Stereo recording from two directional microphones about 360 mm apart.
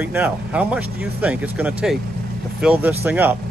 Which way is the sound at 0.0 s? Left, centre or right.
Centre.